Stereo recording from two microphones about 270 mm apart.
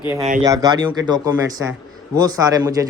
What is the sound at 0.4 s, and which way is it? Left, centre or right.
A man's voice, centre.